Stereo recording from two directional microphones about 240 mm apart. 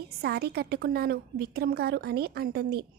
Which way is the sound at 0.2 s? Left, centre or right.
Right.